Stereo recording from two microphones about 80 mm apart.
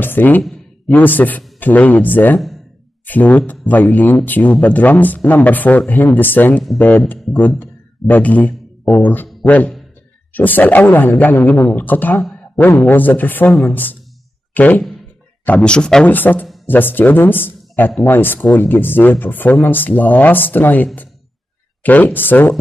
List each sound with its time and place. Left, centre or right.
0.0 s speech: left
16.1 s speech: left